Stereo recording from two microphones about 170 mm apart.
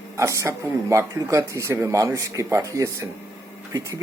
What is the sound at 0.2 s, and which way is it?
Speech, 20° right (ahead or behind).